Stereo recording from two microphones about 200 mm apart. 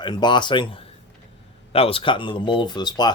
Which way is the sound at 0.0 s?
20° left (ahead or behind).